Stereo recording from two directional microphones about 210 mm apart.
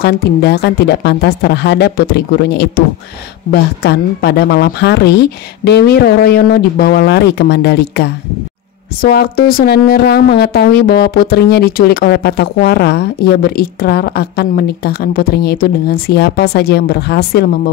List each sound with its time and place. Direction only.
0.0 s speech: 50° left (ahead or behind)
3.8 s speech: 50° left (ahead or behind)